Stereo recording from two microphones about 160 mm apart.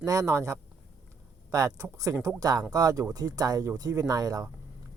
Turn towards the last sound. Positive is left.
turn(degrees=-25)  # may be behind; listen again after turning